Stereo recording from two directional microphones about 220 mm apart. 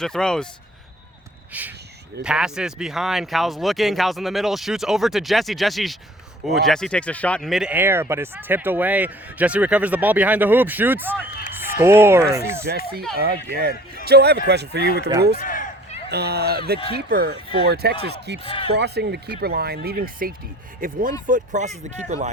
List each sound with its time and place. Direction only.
0.0 s speech: 5° left (ahead or behind)
1.5 s speech: 5° right (ahead or behind)
11.3 s run: 45° left (ahead or behind)
11.8 s speech: 10° right (ahead or behind)
13.1 s speech: 45° right (ahead or behind)
15.4 s a sound: 35° left (ahead or behind)
16.0 s speech: 45° right (ahead or behind)
18.4 s speech: 25° left (ahead or behind)
18.7 s speech: 50° right (ahead or behind); by 22.3 s 30° right (ahead or behind)